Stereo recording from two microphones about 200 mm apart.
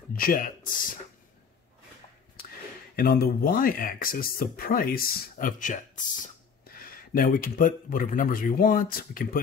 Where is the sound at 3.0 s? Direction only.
45° left (ahead or behind).